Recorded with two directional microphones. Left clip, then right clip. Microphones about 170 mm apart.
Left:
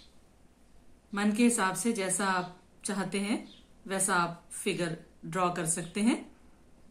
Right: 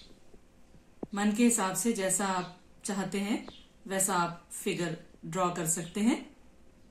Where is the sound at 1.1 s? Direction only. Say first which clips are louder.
Even; 15° right (ahead or behind).